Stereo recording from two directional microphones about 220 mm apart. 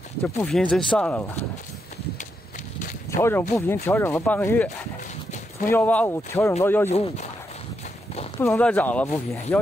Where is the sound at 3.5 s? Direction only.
10° left (ahead or behind).